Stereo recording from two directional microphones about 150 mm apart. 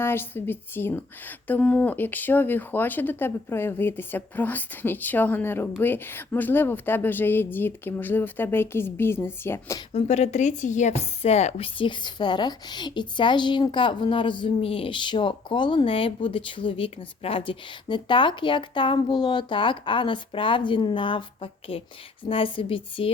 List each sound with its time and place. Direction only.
0.0 s a woman's voice: 15° left (ahead or behind)
9.9 s a woman's voice: 50° left (ahead or behind)